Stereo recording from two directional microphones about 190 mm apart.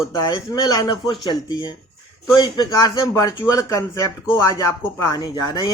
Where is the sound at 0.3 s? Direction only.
20° left (ahead or behind).